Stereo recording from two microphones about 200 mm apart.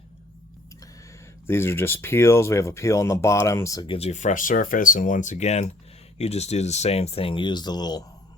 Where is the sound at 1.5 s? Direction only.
10° left (ahead or behind).